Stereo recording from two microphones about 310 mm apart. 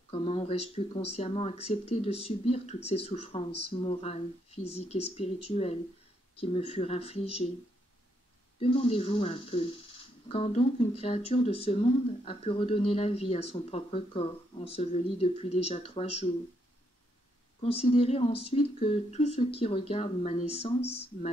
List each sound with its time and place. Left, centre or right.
0.1 s speech: centre
8.5 s speech: centre
17.6 s speech: centre